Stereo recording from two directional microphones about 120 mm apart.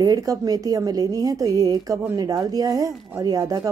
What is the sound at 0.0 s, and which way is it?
A woman's voice, 30° right (ahead or behind).